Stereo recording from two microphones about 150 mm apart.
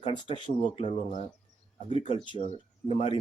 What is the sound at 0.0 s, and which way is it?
Speech, 35° left (ahead or behind).